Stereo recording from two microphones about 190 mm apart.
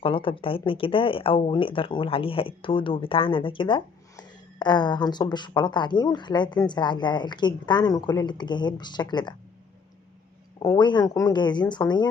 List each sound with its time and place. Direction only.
0.0 s speech: 25° left (ahead or behind)
10.6 s speech: 20° left (ahead or behind)